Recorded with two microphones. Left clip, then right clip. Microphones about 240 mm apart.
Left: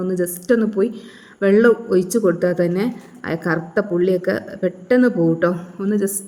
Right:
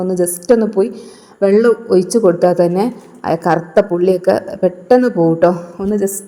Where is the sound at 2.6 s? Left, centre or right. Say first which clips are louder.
Right 6 dB; centre.